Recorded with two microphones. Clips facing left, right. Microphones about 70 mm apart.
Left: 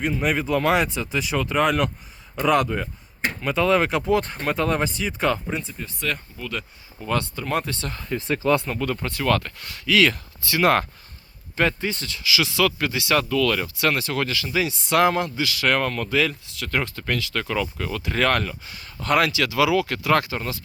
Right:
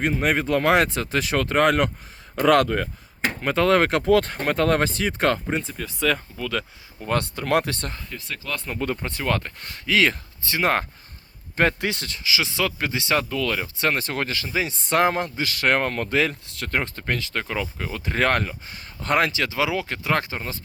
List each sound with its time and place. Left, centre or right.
0.3 s speech: right
5.7 s speech: right
7.0 s speech: right
8.1 s speech: left
9.0 s speech: right
9.6 s speech: right
11.8 s speech: right
12.0 s speech: right
13.7 s speech: right
18.0 s speech: right